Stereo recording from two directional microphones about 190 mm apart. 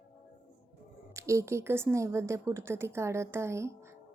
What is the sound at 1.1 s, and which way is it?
A woman's voice, 15° right (ahead or behind).